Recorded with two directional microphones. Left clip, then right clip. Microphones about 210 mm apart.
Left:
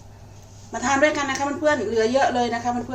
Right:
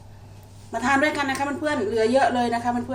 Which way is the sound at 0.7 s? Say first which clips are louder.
Left 1 dB; 15° right (ahead or behind).